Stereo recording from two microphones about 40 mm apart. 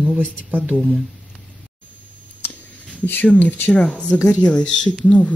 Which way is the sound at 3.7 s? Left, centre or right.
Left.